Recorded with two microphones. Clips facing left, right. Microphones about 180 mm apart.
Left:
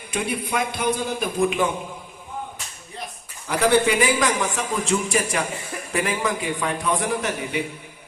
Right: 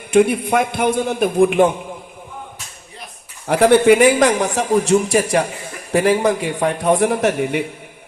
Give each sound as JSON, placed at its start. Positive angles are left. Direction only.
{"t": 0.1, "sound": "a man's voice", "side_deg": -55}
{"t": 3.4, "sound": "a man's voice", "side_deg": -55}